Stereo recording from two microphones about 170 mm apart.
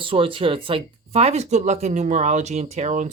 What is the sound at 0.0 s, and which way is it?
Speech, 30° right (ahead or behind).